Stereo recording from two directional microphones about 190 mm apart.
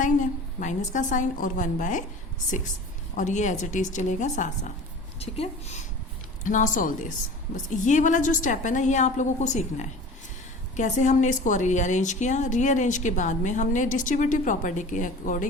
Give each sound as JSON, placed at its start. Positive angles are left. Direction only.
{"t": 0.0, "sound": "a woman's voice", "side_deg": 40}
{"t": 3.2, "sound": "a woman's voice", "side_deg": 40}